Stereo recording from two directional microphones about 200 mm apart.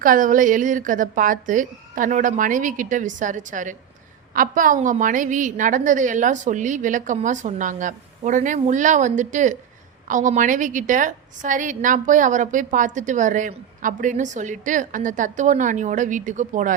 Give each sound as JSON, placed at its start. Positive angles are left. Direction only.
{"t": 0.0, "sound": "a woman's voice", "side_deg": -40}